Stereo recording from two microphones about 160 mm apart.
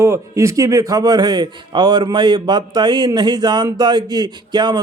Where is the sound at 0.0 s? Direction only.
20° right (ahead or behind).